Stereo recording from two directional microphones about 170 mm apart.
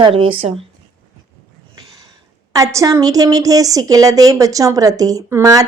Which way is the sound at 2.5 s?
20° right (ahead or behind).